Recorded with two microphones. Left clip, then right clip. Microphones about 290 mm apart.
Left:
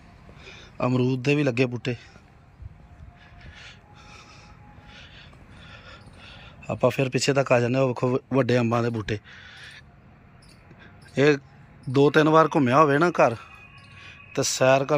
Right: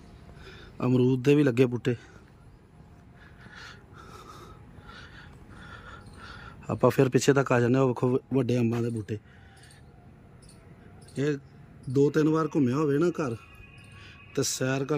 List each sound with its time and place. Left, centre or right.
0.4 s a man's voice: centre
3.4 s a sound: centre
11.9 s speech: centre
12.2 s speech: left
12.7 s speech: centre
13.9 s a sound: centre